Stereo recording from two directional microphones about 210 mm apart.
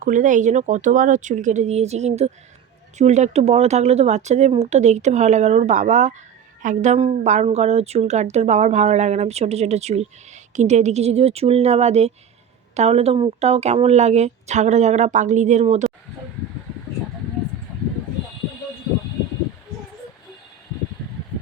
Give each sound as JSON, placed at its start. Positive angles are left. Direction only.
{"t": 0.0, "sound": "a woman's voice", "side_deg": -40}